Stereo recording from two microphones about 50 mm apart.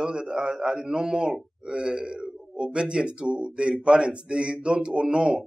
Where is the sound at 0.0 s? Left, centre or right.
Centre.